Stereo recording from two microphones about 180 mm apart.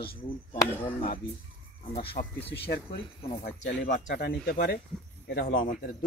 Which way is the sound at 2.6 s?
60° left (ahead or behind).